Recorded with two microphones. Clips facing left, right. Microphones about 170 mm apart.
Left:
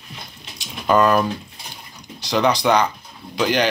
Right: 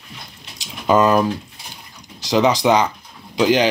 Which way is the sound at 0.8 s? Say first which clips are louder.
Right 1 dB; 15° right (ahead or behind).